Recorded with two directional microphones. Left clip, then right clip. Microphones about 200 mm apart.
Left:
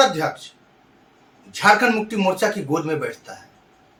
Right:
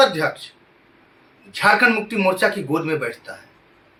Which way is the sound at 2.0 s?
15° left (ahead or behind).